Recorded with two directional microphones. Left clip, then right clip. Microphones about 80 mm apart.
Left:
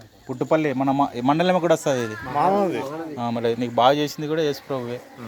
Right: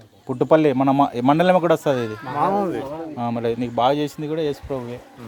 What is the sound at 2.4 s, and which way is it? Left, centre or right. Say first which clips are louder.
Speech: left 1 dB; right.